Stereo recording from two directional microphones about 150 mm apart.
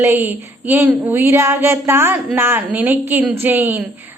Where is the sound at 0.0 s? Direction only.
15° right (ahead or behind).